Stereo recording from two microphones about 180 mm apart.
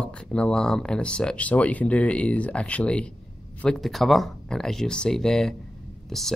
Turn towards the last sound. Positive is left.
turn(degrees=0)  # may be behind; listen again after turning